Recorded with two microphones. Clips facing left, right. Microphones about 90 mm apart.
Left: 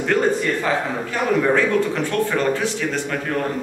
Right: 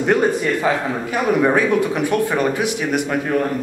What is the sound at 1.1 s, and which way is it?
Speech, 15° right (ahead or behind).